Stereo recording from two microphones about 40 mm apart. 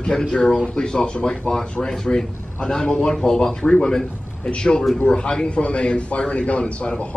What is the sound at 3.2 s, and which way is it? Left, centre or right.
A man's voice, centre.